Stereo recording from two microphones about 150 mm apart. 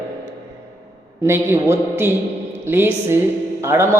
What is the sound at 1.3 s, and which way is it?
A woman's voice, 15° right (ahead or behind).